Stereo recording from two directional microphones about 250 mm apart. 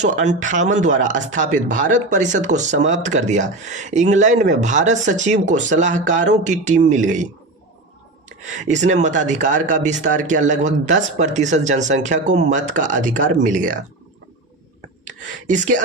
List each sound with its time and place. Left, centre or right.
0.0 s speech: right
8.5 s speech: right
15.0 s a sound: right